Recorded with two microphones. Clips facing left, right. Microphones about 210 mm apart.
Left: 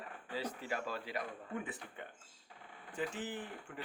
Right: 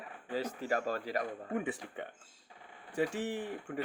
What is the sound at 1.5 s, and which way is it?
Speech, 75° right (ahead or behind).